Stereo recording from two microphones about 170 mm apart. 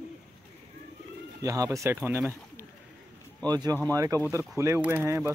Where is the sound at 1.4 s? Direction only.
20° right (ahead or behind).